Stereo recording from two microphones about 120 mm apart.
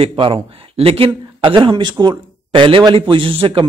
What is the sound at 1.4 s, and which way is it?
Speech, 40° right (ahead or behind).